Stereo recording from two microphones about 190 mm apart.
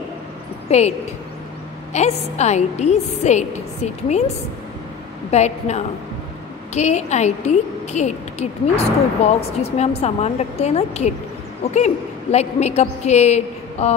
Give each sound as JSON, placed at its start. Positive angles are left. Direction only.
{"t": 0.7, "sound": "a woman's voice", "side_deg": 35}
{"t": 5.3, "sound": "a woman's voice", "side_deg": 35}